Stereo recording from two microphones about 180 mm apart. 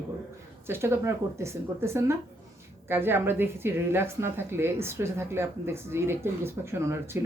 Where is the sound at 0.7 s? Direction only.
15° right (ahead or behind).